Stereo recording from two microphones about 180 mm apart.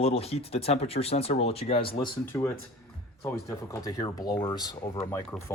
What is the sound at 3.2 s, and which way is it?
Speech, 15° left (ahead or behind).